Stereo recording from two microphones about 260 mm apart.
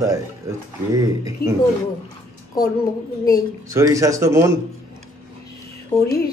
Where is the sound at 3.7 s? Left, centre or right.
Centre.